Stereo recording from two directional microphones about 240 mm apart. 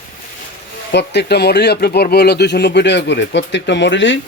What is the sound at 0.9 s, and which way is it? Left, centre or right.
Speech, left.